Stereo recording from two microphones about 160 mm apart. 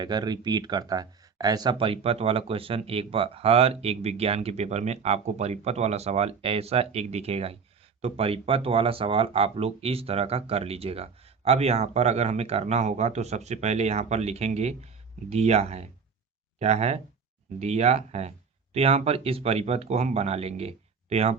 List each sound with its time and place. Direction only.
0.0 s speech: 25° right (ahead or behind)